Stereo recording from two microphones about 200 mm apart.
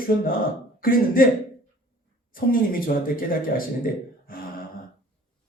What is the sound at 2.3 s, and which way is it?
Speech, 45° left (ahead or behind).